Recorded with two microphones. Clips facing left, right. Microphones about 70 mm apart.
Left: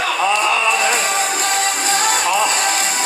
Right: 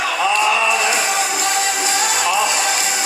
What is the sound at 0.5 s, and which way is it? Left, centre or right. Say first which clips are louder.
Music: even; left.